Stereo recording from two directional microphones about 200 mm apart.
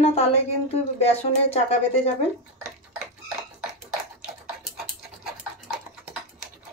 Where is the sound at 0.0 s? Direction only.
30° left (ahead or behind).